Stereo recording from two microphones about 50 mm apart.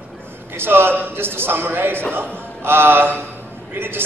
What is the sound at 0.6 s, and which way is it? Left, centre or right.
A man's voice, right.